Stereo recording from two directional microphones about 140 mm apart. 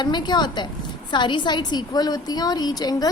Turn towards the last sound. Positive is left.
turn(degrees=25)  # may be behind; listen again after turning